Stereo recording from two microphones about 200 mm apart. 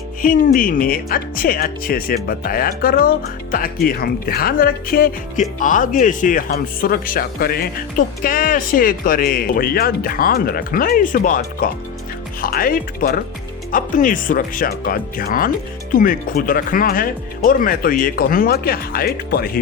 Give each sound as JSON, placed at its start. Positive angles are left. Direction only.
{"t": 0.2, "sound": "speech", "side_deg": 45}